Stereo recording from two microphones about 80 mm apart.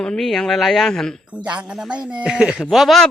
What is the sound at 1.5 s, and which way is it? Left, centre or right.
Speech, centre.